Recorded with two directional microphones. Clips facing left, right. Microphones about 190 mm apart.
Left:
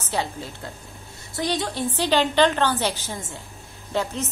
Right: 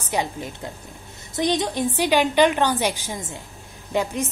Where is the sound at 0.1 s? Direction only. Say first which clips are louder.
Right 2 dB; 15° right (ahead or behind).